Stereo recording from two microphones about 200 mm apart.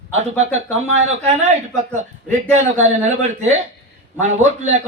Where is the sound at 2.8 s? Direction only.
35° right (ahead or behind).